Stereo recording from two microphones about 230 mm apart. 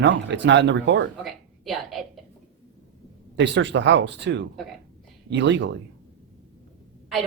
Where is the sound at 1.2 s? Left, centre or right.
Centre.